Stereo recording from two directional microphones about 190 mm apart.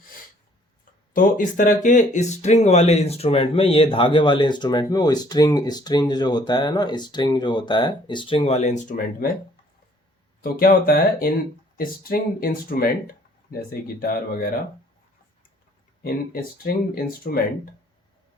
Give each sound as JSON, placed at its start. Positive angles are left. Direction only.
{"t": 1.1, "sound": "speech", "side_deg": 45}
{"t": 10.4, "sound": "speech", "side_deg": 50}
{"t": 16.0, "sound": "speech", "side_deg": 55}